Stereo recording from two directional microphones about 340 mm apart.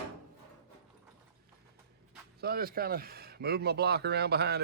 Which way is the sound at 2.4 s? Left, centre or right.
Right.